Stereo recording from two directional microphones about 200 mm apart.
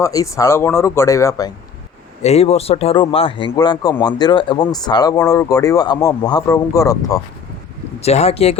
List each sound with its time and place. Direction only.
0.0 s speech: 15° left (ahead or behind)
2.2 s speech: 30° left (ahead or behind); by 7.2 s 15° left (ahead or behind)
8.0 s speech: 30° left (ahead or behind)